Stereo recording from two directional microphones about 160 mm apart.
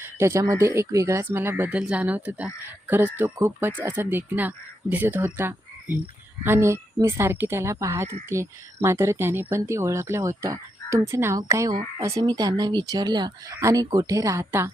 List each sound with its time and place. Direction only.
0.0 s speech: 15° right (ahead or behind)